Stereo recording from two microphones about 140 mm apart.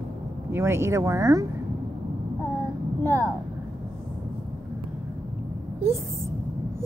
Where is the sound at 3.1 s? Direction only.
25° right (ahead or behind).